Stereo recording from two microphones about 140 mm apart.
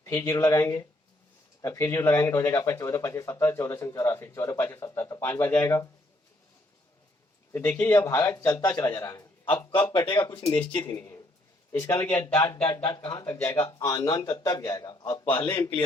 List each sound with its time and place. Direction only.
0.0 s speech: 15° left (ahead or behind)
7.5 s a man's voice: 20° left (ahead or behind)
10.0 s speech: 30° left (ahead or behind)
13.2 s a man's voice: 15° left (ahead or behind)